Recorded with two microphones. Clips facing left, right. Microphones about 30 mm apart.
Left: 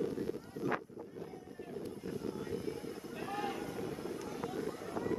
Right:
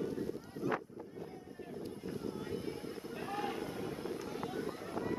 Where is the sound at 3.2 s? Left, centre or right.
Centre.